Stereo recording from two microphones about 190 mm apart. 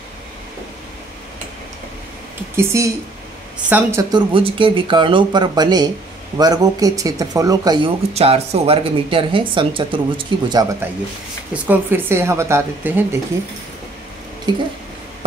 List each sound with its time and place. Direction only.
2.5 s a woman's voice: 15° right (ahead or behind)
4.1 s speech: 25° right (ahead or behind)
11.5 s a woman's voice: 10° right (ahead or behind)
14.5 s speech: 20° right (ahead or behind)